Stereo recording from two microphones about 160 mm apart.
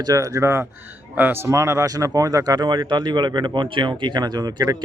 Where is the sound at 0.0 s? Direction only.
25° right (ahead or behind).